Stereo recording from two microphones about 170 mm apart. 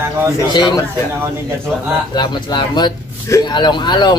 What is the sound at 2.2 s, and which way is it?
Speech, 25° left (ahead or behind).